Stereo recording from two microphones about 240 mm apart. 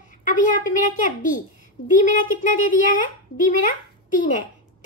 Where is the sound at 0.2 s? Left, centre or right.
Left.